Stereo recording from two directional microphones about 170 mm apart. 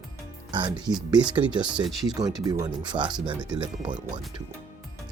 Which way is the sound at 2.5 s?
20° right (ahead or behind).